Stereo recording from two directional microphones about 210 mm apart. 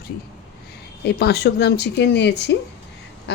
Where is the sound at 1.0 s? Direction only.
50° left (ahead or behind).